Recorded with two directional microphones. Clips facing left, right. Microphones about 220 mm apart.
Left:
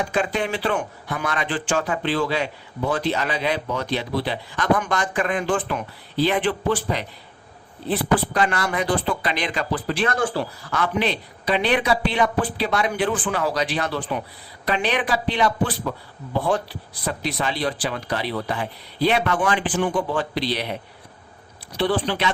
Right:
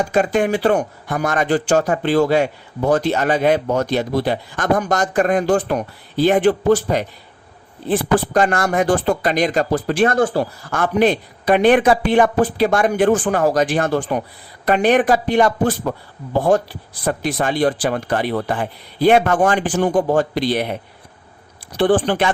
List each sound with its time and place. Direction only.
0.0 s speech: 45° right (ahead or behind)
21.8 s speech: 50° right (ahead or behind)